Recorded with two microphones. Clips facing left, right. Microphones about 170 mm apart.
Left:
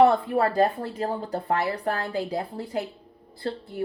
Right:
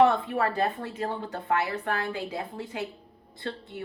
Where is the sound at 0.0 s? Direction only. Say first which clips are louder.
Left 3 dB; 35° left (ahead or behind).